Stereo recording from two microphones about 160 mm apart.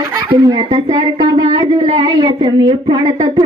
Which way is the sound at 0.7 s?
40° right (ahead or behind).